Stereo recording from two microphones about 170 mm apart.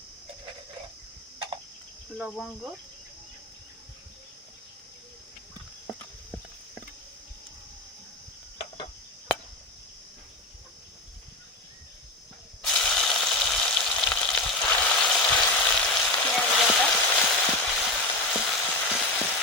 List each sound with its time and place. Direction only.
2.1 s cricket: centre (ahead or behind)
5.9 s a sound: 10° left (ahead or behind)
12.6 s frying: 5° left (ahead or behind)